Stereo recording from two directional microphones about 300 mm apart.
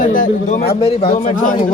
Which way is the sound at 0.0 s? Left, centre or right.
Left.